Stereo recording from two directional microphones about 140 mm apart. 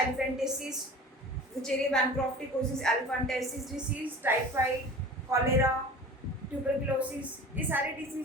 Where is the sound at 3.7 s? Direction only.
10° right (ahead or behind).